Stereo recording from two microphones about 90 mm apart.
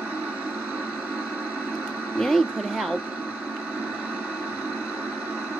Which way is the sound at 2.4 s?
10° right (ahead or behind).